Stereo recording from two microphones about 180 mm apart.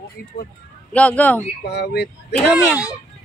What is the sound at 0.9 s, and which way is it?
Speech, 5° left (ahead or behind).